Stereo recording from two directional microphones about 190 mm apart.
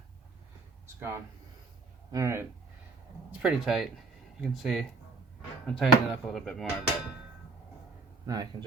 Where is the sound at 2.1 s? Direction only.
15° right (ahead or behind).